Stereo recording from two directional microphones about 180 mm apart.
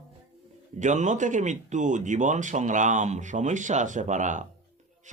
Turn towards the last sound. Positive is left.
turn(degrees=-45)  # may be behind; listen again after turning